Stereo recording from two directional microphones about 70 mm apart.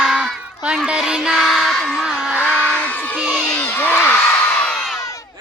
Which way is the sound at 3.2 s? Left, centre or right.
Centre.